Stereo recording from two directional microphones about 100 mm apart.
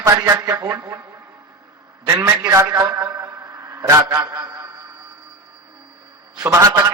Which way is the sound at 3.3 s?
35° right (ahead or behind).